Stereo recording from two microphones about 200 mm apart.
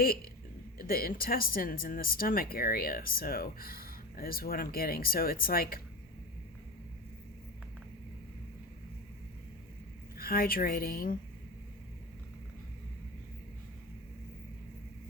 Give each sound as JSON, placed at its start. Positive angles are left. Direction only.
{"t": 0.0, "sound": "speech", "side_deg": 45}
{"t": 10.2, "sound": "speech", "side_deg": 45}